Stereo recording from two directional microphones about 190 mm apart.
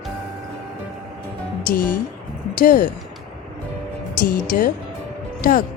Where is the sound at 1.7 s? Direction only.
50° left (ahead or behind).